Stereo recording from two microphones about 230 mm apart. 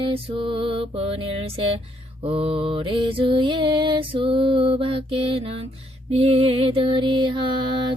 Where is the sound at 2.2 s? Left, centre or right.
Right.